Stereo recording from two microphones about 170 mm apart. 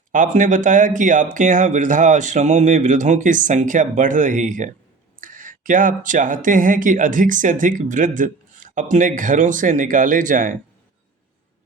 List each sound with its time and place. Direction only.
0.1 s speech: 50° right (ahead or behind)